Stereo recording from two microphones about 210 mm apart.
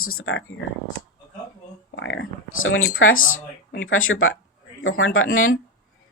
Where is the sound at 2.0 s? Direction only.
65° left (ahead or behind).